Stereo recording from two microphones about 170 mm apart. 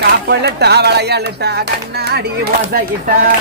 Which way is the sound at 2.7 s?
55° right (ahead or behind).